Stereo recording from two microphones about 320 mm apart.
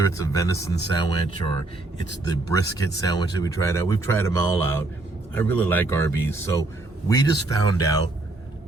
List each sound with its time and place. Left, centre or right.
0.0 s speech: centre